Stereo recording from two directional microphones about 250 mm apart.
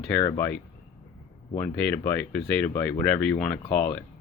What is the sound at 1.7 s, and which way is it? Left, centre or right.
Speech, centre.